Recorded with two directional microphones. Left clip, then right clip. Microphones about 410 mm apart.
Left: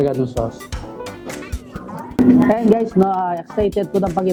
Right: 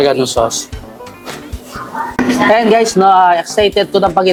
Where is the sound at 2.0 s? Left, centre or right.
Centre.